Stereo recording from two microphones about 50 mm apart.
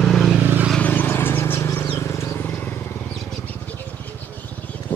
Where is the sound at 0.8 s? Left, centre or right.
Left.